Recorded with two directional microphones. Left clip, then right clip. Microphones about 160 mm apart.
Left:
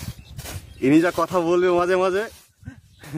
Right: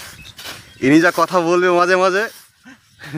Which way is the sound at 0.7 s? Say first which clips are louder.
Right 5 dB; 30° right (ahead or behind).